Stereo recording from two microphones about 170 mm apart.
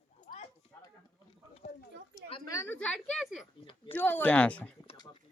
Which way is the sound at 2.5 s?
15° left (ahead or behind).